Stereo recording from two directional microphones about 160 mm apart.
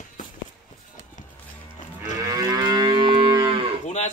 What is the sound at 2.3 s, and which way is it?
Moo, 25° right (ahead or behind).